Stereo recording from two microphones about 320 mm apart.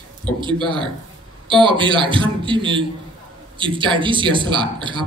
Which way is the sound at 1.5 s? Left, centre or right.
Centre.